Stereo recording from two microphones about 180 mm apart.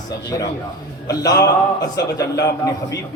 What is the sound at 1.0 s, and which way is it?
A man's voice, 20° left (ahead or behind).